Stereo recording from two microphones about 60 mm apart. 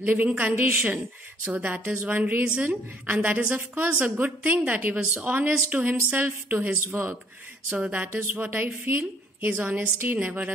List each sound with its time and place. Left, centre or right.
0.0 s a woman's voice: right